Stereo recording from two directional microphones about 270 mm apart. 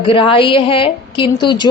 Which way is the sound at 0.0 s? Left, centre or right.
Centre.